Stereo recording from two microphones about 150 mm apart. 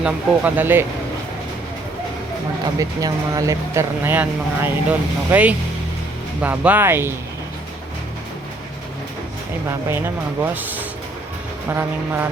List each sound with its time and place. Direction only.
0.0 s speech: 10° right (ahead or behind)
2.7 s speech: 25° right (ahead or behind)
10.4 s speech: 10° right (ahead or behind)